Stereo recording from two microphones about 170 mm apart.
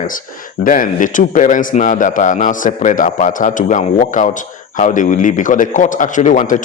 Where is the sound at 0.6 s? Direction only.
50° left (ahead or behind).